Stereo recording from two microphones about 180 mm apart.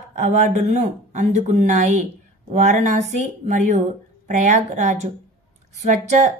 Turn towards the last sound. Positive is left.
turn(degrees=-40)  # may be behind; listen again after turning